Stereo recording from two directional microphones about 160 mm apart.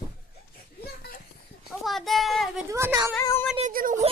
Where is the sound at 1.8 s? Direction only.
Centre (ahead or behind).